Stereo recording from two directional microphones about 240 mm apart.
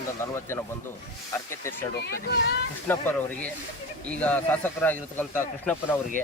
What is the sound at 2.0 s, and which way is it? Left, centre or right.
Speech, left.